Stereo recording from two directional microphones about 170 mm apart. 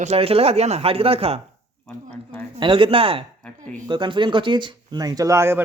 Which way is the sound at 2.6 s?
30° right (ahead or behind).